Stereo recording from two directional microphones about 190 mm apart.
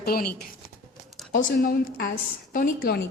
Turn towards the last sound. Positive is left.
turn(degrees=55)  # may be behind; listen again after turning